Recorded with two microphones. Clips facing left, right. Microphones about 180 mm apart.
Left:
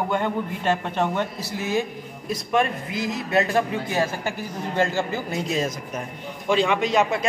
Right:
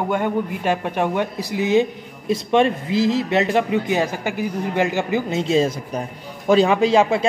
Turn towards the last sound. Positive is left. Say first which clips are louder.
# right 5 dB
turn(degrees=-30)  # may be behind; listen again after turning